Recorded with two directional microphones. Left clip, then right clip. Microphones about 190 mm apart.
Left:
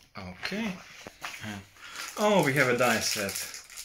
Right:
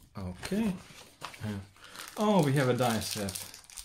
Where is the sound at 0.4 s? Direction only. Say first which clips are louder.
Left 1 dB; 55° right (ahead or behind).